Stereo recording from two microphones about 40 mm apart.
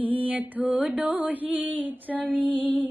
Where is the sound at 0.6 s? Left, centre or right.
Right.